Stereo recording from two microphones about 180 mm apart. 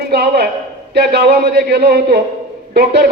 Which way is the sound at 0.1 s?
60° right (ahead or behind).